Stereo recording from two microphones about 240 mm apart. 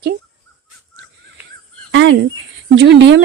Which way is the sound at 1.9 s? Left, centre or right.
Right.